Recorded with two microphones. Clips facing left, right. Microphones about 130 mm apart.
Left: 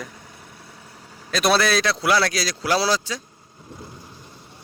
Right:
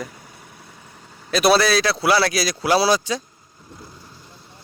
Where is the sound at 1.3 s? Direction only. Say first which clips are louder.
Right 3 dB; 5° right (ahead or behind).